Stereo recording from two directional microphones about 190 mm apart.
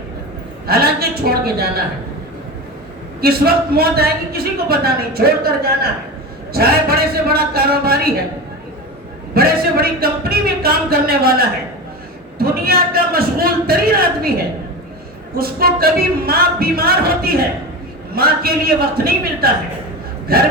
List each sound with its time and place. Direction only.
0.7 s a man's voice: 55° right (ahead or behind)
3.2 s a man's voice: 55° right (ahead or behind)
9.3 s speech: 55° right (ahead or behind)
15.4 s speech: 50° right (ahead or behind)